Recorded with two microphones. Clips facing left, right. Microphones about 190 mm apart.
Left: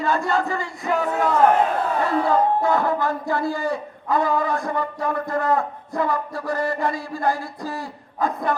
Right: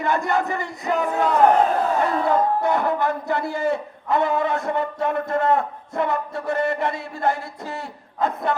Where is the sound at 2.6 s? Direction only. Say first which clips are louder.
Even; 20° right (ahead or behind).